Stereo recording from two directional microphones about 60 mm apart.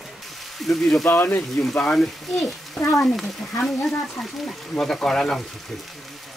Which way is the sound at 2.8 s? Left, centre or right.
Left.